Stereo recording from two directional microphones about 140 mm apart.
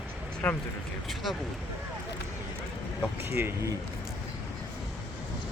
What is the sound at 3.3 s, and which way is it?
Speech, 15° right (ahead or behind).